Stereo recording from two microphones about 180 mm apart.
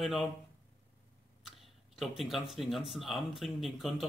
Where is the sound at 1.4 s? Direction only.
Centre (ahead or behind).